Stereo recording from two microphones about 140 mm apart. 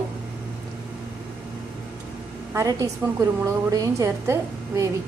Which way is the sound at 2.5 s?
20° right (ahead or behind).